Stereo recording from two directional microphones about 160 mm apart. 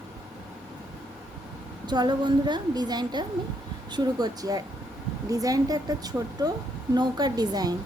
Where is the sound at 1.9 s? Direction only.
30° right (ahead or behind).